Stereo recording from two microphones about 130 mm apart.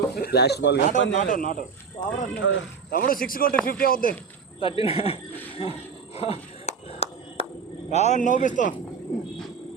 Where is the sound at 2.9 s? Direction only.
90° left.